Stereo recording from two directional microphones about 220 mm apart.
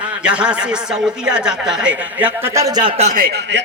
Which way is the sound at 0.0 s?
5° right (ahead or behind).